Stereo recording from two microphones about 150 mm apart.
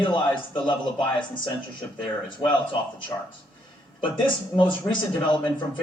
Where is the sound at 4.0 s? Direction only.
35° left (ahead or behind).